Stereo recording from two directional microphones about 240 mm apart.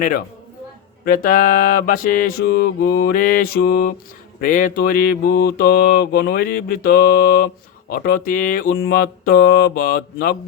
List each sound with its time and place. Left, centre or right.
1.0 s mantra: left